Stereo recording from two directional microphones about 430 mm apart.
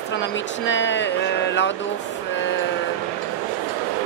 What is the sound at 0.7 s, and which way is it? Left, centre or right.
Speech, left.